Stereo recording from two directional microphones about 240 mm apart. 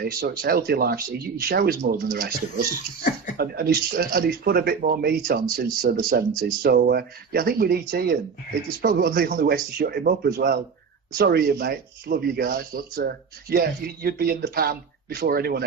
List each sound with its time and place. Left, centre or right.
0.0 s speech: right